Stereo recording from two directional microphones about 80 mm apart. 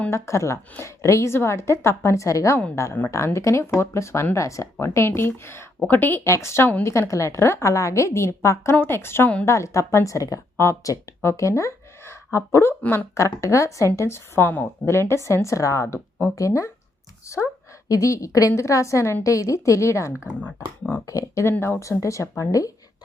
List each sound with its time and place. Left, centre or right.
0.1 s a woman's voice: left
6.2 s a woman's voice: left
20.4 s speech: centre
21.1 s a woman's voice: left